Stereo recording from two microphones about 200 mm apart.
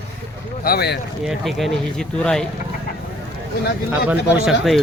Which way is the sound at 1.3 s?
Centre (ahead or behind).